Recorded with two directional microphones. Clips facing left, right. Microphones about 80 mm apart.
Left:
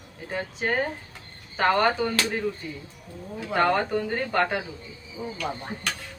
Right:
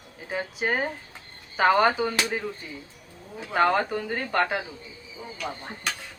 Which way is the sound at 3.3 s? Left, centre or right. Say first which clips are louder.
Even; centre.